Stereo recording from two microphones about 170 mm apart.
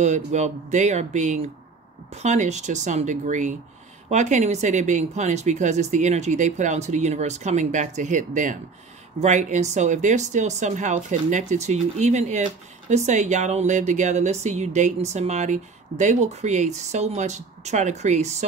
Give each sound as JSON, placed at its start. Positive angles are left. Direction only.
{"t": 0.0, "sound": "speech", "side_deg": -45}